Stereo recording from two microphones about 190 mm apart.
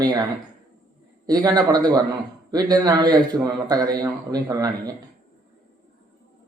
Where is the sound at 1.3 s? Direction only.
20° right (ahead or behind).